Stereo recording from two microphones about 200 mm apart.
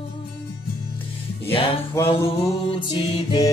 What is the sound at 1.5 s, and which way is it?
Music, 25° left (ahead or behind).